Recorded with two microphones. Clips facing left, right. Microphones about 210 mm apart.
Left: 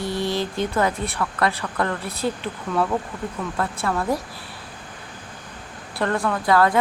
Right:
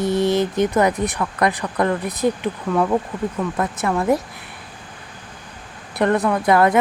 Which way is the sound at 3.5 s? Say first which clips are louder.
Right 1 dB; 20° right (ahead or behind).